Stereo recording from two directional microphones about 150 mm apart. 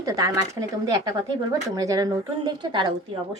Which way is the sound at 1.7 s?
25° right (ahead or behind).